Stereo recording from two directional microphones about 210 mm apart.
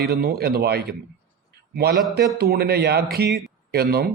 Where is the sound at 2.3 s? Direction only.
45° right (ahead or behind).